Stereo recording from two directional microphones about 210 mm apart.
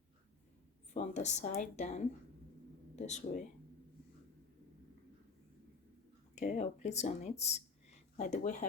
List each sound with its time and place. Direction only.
0.9 s speech: 35° left (ahead or behind)
6.3 s speech: 35° left (ahead or behind)